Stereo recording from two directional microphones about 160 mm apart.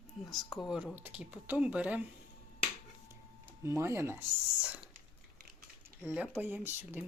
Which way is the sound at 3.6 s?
20° right (ahead or behind).